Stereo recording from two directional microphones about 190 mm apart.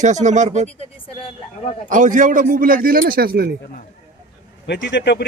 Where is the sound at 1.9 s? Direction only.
40° right (ahead or behind).